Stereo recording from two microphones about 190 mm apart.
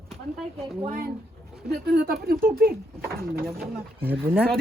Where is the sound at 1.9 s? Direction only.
55° right (ahead or behind).